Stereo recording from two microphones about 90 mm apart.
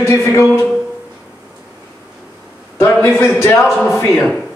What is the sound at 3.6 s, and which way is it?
Speech, 5° left (ahead or behind).